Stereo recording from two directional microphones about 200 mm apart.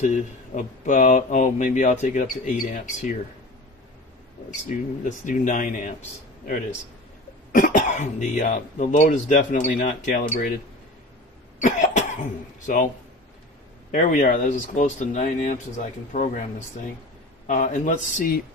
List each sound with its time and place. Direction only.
0.6 s speech: 40° left (ahead or behind)
2.2 s speech: centre (ahead or behind)
2.7 s speech: 40° left (ahead or behind)
4.6 s speech: 40° left (ahead or behind)
11.6 s cough: 40° left (ahead or behind)
13.9 s speech: 40° left (ahead or behind)